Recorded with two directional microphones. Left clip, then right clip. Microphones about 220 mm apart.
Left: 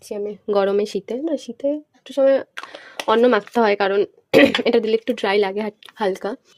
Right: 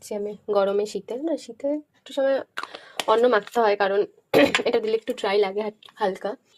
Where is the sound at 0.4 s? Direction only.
40° left (ahead or behind).